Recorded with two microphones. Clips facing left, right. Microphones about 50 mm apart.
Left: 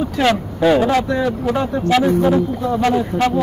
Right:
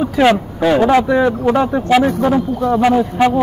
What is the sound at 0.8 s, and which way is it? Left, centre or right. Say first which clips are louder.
Speech: right 5 dB; right.